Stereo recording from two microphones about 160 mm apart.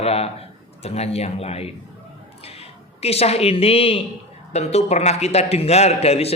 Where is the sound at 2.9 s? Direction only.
40° left (ahead or behind).